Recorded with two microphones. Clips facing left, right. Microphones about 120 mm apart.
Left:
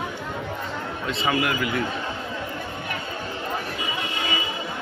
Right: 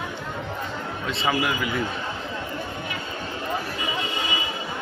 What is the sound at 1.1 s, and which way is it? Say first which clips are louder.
Speech: even; centre (ahead or behind).